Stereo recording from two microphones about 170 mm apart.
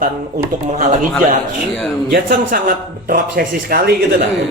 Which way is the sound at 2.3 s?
55° right (ahead or behind).